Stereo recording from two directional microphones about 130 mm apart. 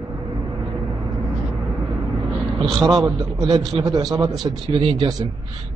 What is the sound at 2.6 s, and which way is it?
Speech, centre (ahead or behind).